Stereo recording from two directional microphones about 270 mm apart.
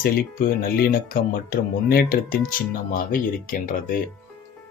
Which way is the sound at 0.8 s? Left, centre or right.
Left.